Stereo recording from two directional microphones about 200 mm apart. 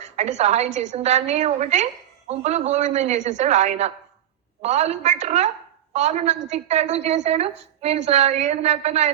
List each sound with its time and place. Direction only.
0.0 s a woman's voice: 35° right (ahead or behind)